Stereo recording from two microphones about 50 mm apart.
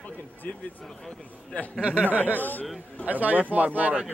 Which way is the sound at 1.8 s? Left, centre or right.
Right.